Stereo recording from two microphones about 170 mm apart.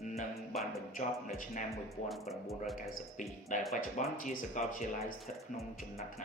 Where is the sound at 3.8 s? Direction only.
50° left (ahead or behind).